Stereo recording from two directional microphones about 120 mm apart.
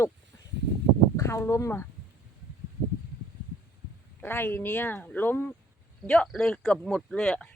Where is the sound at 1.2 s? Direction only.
25° left (ahead or behind).